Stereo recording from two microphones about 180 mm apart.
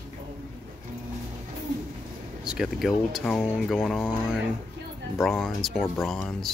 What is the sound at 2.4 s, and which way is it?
Speech, centre (ahead or behind).